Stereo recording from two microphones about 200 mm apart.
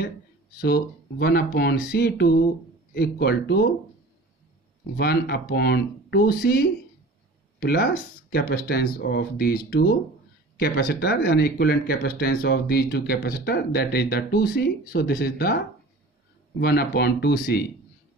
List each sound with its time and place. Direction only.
0.6 s speech: 50° left (ahead or behind)
4.9 s speech: 50° left (ahead or behind)